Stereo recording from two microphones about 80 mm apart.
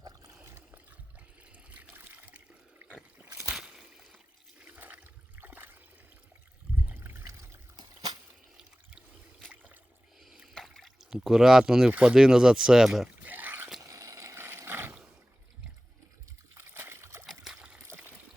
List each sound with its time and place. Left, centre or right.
0.0 s a sound: right
1.7 s water: right
3.5 s a sound: centre
4.6 s toilet flush: centre
5.4 s a sound: right
6.8 s water: right
7.8 s a sound: right
10.5 s speech: centre
13.2 s pour: right
13.9 s boat: right
16.6 s water: right
17.5 s trickle: centre
17.8 s trickle: right